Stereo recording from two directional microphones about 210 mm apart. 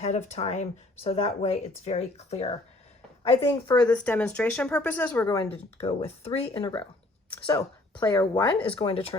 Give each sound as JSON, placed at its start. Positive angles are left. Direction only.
{"t": 0.0, "sound": "speech", "side_deg": 30}
{"t": 3.2, "sound": "speech", "side_deg": 20}
{"t": 5.5, "sound": "speech", "side_deg": 30}